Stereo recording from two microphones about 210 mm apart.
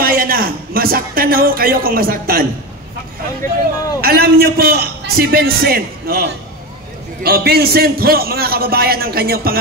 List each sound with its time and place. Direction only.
0.0 s speech: 45° right (ahead or behind)
4.0 s a man's voice: 45° right (ahead or behind)
7.2 s a man's voice: 45° right (ahead or behind)